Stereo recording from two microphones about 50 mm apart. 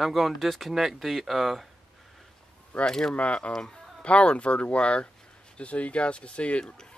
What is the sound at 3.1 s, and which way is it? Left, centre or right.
Speech, left.